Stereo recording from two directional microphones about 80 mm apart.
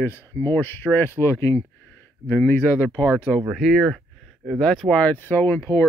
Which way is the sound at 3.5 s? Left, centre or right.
Centre.